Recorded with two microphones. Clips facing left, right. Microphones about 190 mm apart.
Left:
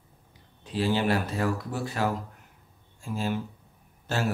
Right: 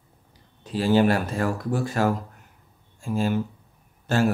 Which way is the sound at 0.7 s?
45° right (ahead or behind).